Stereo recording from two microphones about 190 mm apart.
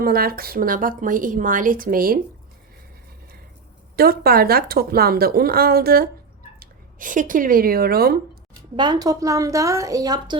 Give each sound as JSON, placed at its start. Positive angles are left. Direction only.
{"t": 0.0, "sound": "speech", "side_deg": -50}
{"t": 3.9, "sound": "speech", "side_deg": -50}
{"t": 8.7, "sound": "a woman's voice", "side_deg": -25}